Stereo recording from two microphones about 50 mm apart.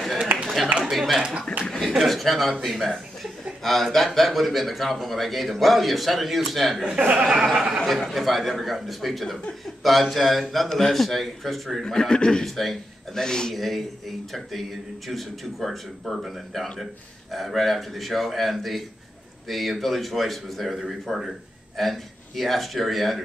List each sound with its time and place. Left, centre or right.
0.3 s a sound: right
0.9 s a man's voice: centre
7.0 s speech: right
7.2 s speech: centre
8.1 s a man's voice: centre
11.8 s speech: centre
12.4 s a man's voice: centre